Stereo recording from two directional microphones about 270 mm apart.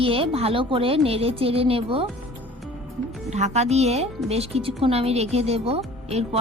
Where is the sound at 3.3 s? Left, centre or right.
Right.